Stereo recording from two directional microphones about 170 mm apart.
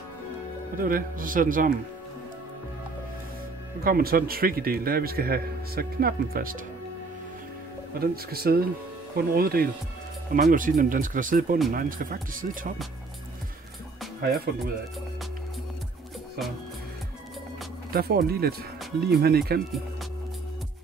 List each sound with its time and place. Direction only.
0.7 s speech: 55° right (ahead or behind)
3.8 s a man's voice: 60° right (ahead or behind)
8.0 s a man's voice: 65° right (ahead or behind)
14.2 s speech: 65° right (ahead or behind)
17.9 s a man's voice: 65° right (ahead or behind)